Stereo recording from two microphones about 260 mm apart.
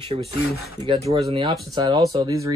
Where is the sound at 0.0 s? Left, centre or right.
Right.